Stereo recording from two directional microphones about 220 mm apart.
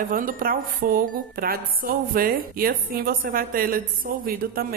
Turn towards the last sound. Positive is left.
turn(degrees=-40)  # may be behind; listen again after turning